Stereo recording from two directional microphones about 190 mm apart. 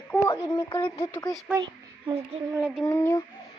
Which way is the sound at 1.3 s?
Centre (ahead or behind).